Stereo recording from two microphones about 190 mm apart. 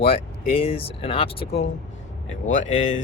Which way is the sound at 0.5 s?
30° left (ahead or behind).